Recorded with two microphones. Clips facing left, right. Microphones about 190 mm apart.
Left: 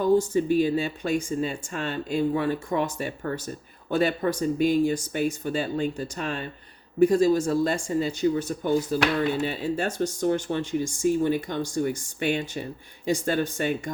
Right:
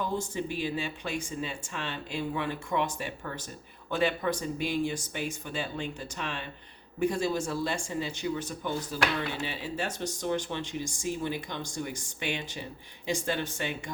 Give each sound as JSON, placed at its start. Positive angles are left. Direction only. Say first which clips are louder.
{"t": 0.0, "sound": "speech", "louder": "left 11 dB", "side_deg": 45}